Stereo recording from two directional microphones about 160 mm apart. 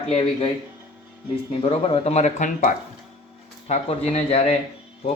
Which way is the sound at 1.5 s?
40° left (ahead or behind).